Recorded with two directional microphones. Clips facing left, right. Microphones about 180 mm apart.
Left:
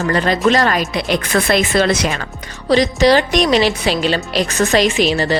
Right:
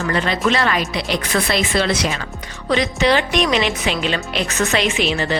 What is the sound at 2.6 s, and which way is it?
A woman's voice, 35° left (ahead or behind).